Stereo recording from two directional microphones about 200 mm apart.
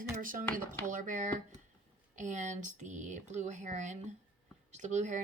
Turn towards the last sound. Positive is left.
turn(degrees=-35)  # may be behind; listen again after turning